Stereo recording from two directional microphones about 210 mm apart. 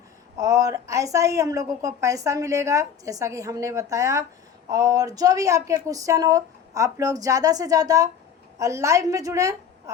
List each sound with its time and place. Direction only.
0.3 s a woman's voice: 15° right (ahead or behind)